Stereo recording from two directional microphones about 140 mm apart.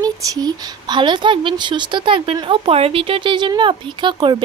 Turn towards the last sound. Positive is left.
turn(degrees=-35)  # may be behind; listen again after turning